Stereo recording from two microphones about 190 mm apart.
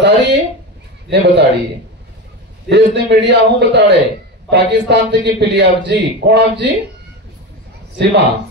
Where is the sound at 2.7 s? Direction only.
65° right (ahead or behind).